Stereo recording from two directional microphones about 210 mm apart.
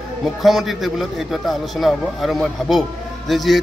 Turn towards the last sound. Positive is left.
turn(degrees=0)  # may be behind; listen again after turning